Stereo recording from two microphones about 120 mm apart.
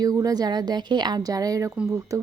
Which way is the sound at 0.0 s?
30° right (ahead or behind).